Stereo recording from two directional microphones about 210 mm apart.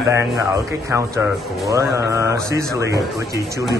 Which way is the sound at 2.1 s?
15° right (ahead or behind).